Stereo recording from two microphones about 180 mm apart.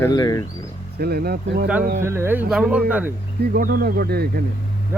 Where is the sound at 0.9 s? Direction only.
60° right (ahead or behind).